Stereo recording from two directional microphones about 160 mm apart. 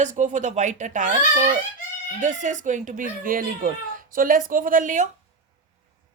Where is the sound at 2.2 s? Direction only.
50° right (ahead or behind).